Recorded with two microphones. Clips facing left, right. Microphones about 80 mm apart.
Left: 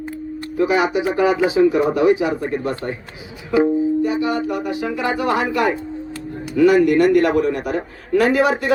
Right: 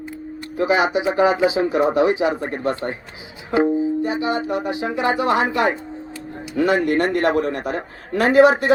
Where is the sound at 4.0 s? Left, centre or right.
Right.